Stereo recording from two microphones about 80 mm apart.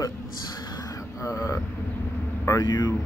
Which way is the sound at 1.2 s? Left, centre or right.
Left.